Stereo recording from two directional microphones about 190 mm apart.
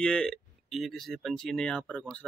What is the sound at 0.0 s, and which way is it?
Speech, 5° left (ahead or behind).